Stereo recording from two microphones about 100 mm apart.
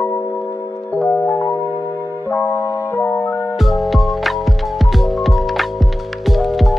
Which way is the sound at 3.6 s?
Centre (ahead or behind).